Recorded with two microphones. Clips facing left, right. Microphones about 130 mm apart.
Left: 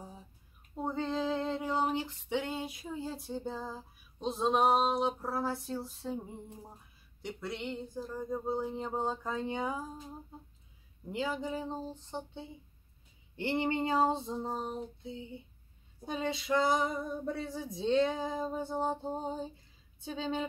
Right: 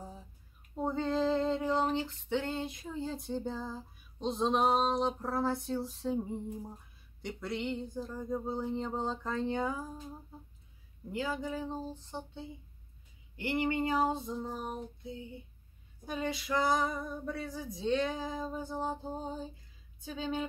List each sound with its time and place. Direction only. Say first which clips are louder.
0.7 s female singing: right 2 dB; centre (ahead or behind)
7.2 s a sound: right 2 dB; centre (ahead or behind)
11.1 s female singing: left 1 dB; 20° left (ahead or behind)
13.4 s female singing: even; 30° left (ahead or behind)